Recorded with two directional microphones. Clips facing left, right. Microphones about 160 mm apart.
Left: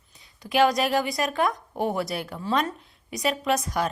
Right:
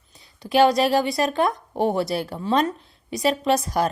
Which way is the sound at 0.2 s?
30° right (ahead or behind).